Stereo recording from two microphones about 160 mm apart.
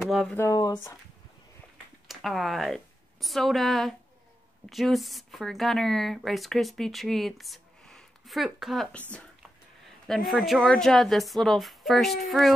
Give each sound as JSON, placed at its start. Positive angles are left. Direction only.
{"t": 0.0, "sound": "speech", "side_deg": 0}
{"t": 0.4, "sound": "speech", "side_deg": 20}
{"t": 2.0, "sound": "speech", "side_deg": 0}
{"t": 10.0, "sound": "speech", "side_deg": 0}